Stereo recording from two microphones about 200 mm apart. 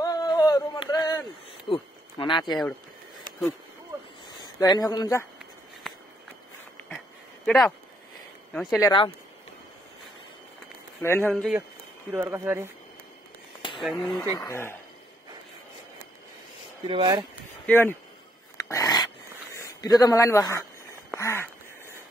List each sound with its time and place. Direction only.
0.0 s a sound: 20° left (ahead or behind)
1.7 s speech: 25° left (ahead or behind)
4.6 s speech: 20° left (ahead or behind)
7.4 s speech: centre (ahead or behind)
8.8 s speech: 25° left (ahead or behind)
11.0 s a man's voice: 10° left (ahead or behind)
12.1 s speech: 10° right (ahead or behind)
13.7 s speech: centre (ahead or behind)
14.4 s a man's voice: 10° left (ahead or behind)
16.8 s speech: 20° right (ahead or behind)
17.6 s a man's voice: 10° left (ahead or behind)
18.6 s dog: 15° left (ahead or behind)
19.5 s speech: 15° left (ahead or behind)
21.2 s a sound: 15° left (ahead or behind)